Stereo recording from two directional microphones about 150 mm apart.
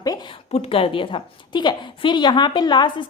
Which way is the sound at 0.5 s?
35° left (ahead or behind).